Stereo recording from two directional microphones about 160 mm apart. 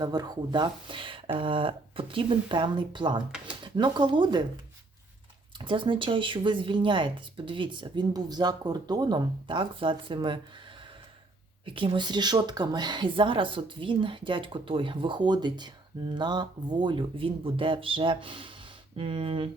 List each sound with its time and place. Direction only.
0.0 s speech: 25° right (ahead or behind)
5.5 s speech: 30° right (ahead or behind)
11.6 s speech: 30° right (ahead or behind)